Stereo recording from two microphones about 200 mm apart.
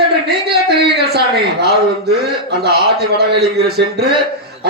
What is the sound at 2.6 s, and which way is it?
A man's voice, 55° right (ahead or behind).